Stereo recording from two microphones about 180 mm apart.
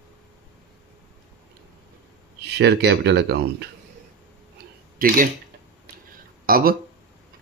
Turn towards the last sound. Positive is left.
turn(degrees=-55)  # may be behind; listen again after turning